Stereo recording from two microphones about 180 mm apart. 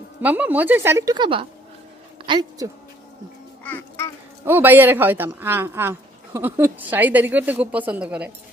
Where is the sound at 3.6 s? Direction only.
10° left (ahead or behind).